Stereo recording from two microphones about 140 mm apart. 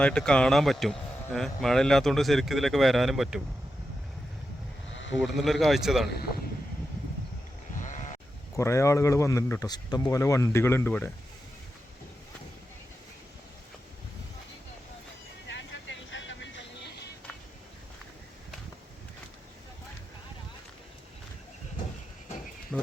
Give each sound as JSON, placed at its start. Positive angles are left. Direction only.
{"t": 0.0, "sound": "speech", "side_deg": 5}
{"t": 5.2, "sound": "speech", "side_deg": 0}
{"t": 7.8, "sound": "sheep", "side_deg": 60}
{"t": 8.5, "sound": "speech", "side_deg": 20}
{"t": 22.7, "sound": "insect", "side_deg": 10}